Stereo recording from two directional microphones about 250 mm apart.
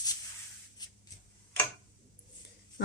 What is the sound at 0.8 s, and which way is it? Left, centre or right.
Writing, centre.